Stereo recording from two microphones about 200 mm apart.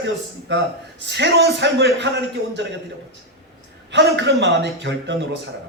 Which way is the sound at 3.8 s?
60° right (ahead or behind).